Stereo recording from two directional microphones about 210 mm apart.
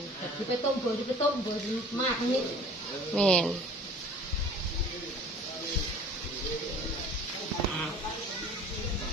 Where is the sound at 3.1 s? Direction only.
5° left (ahead or behind).